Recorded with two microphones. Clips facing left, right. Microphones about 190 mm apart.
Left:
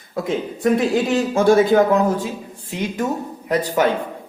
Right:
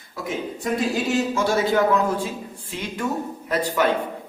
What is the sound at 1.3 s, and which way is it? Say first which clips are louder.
A man's voice: left 11 dB; 55° left (ahead or behind).